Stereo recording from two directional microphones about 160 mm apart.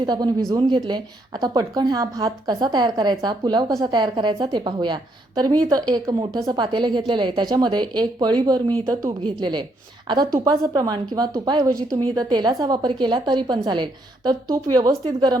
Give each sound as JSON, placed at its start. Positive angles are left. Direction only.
{"t": 0.0, "sound": "a woman's voice", "side_deg": -25}